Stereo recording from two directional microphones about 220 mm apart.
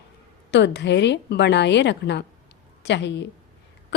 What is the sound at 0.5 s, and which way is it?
A woman's voice, 50° left (ahead or behind).